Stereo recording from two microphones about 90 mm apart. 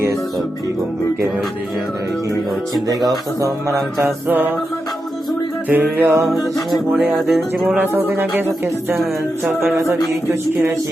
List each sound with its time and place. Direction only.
2.8 s speech: 45° right (ahead or behind)
4.0 s speech: 20° right (ahead or behind)
5.6 s speech: 15° right (ahead or behind)
6.2 s music: centre (ahead or behind)
7.8 s speech: 20° right (ahead or behind)